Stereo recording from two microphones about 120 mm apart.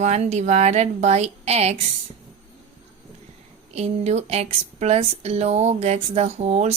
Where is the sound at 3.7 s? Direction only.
65° right (ahead or behind).